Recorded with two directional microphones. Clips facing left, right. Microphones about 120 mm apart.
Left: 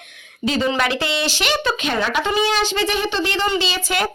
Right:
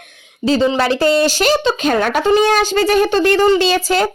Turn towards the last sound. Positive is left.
turn(degrees=-35)  # may be behind; listen again after turning